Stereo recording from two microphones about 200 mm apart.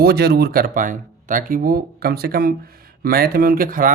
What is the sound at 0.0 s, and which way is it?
Speech, 50° right (ahead or behind).